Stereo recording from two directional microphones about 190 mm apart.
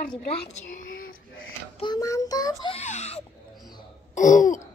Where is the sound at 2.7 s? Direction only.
35° left (ahead or behind).